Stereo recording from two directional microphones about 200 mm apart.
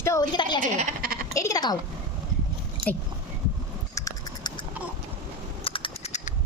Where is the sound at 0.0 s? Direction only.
15° left (ahead or behind).